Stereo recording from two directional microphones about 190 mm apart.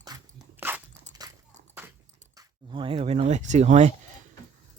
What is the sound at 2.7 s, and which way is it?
Speech, 30° right (ahead or behind).